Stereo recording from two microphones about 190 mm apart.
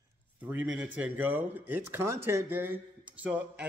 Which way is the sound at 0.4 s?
10° right (ahead or behind).